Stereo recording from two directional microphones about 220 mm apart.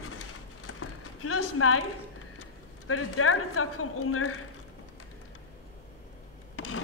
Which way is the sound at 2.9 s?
75° left (ahead or behind).